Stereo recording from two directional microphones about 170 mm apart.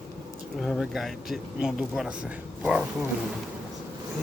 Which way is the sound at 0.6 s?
Centre (ahead or behind).